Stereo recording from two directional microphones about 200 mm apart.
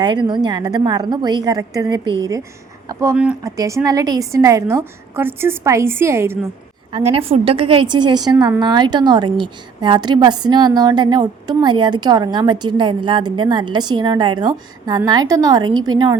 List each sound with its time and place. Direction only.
0.0 s a woman's voice: 20° right (ahead or behind)
6.9 s a woman's voice: 30° right (ahead or behind)